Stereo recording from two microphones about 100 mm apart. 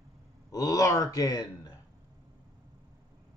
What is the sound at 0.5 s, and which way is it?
Speech, 35° left (ahead or behind).